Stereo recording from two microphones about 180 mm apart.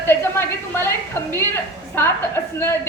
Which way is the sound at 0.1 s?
15° left (ahead or behind).